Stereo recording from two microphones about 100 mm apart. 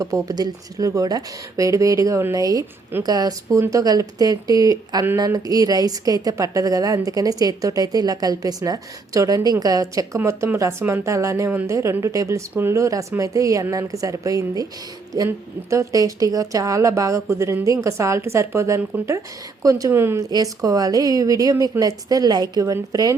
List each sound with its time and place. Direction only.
0.0 s a woman's voice: 35° right (ahead or behind)
10.2 s a woman's voice: 25° right (ahead or behind)
20.1 s a woman's voice: 35° right (ahead or behind)